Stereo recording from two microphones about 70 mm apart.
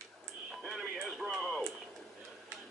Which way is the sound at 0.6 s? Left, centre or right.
Centre.